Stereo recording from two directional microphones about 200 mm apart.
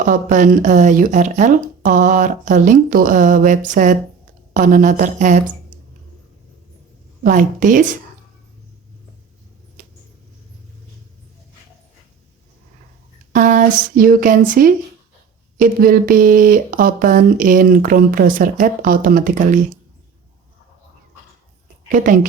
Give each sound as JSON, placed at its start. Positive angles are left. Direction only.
{"t": 0.0, "sound": "speech", "side_deg": -40}
{"t": 7.3, "sound": "speech", "side_deg": -40}
{"t": 13.3, "sound": "speech", "side_deg": -40}
{"t": 21.8, "sound": "a woman's voice", "side_deg": -40}